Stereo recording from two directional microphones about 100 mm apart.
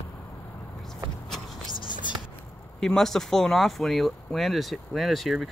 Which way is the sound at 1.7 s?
50° left (ahead or behind).